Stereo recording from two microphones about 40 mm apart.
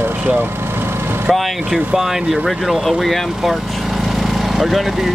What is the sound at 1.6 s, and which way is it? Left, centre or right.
Speech, right.